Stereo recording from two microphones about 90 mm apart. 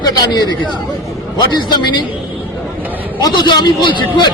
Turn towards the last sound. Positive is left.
turn(degrees=50)  # may be behind; listen again after turning